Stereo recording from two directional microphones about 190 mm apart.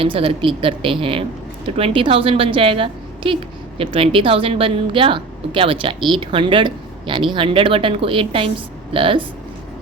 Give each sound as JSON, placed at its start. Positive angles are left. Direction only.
{"t": 0.0, "sound": "a woman's voice", "side_deg": -30}